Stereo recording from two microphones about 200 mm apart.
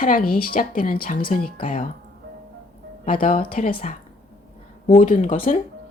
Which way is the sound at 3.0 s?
45° left (ahead or behind).